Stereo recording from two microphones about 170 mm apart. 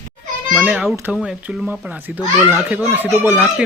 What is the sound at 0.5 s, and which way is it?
Speech, 5° right (ahead or behind).